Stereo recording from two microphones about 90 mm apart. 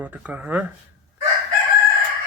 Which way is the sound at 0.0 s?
15° right (ahead or behind).